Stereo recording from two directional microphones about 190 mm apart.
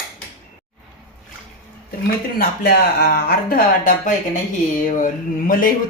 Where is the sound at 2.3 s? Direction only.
55° left (ahead or behind).